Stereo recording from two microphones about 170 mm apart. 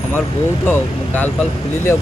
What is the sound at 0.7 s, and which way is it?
Speech, 10° left (ahead or behind).